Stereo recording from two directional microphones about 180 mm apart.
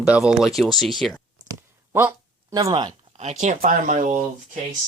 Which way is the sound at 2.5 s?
25° right (ahead or behind).